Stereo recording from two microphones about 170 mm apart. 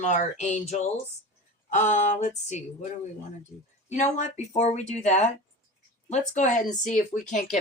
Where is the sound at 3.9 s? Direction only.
45° left (ahead or behind).